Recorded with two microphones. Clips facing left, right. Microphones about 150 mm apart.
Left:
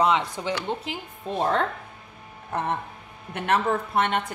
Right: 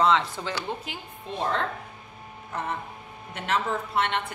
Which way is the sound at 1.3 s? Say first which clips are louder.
Left 4 dB; 45° left (ahead or behind).